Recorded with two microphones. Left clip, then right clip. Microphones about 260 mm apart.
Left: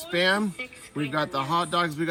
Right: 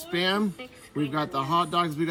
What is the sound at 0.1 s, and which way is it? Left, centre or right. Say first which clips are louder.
Speech: left 3 dB; centre.